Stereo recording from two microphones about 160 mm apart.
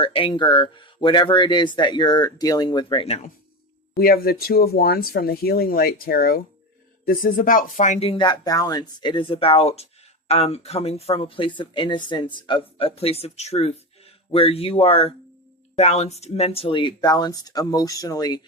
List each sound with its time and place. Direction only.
0.0 s speech: 35° left (ahead or behind)
3.9 s speech: 70° left (ahead or behind); by 18.3 s 20° left (ahead or behind)